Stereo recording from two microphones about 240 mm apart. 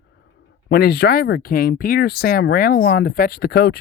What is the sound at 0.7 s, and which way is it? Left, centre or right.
Speech, left.